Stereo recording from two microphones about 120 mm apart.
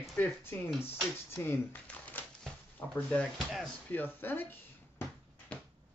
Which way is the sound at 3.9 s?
15° left (ahead or behind).